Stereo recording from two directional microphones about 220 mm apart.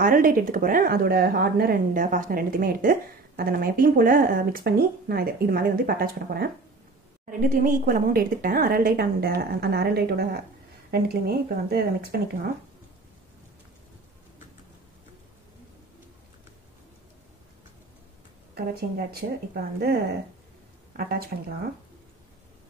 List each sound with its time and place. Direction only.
0.0 s speech: 40° right (ahead or behind)
18.5 s a woman's voice: 45° right (ahead or behind)